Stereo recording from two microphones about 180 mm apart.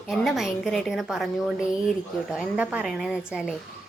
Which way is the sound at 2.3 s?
5° right (ahead or behind).